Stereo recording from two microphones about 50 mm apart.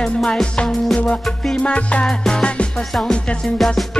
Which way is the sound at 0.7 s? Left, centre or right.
Centre.